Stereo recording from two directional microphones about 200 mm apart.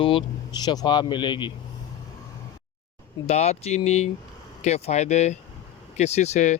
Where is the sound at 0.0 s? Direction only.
25° left (ahead or behind).